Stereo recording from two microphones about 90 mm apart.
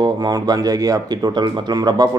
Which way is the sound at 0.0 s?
50° right (ahead or behind).